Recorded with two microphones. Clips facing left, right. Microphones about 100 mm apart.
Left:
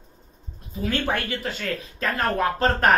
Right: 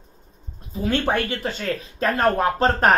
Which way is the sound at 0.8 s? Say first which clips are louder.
Right 4 dB; 25° right (ahead or behind).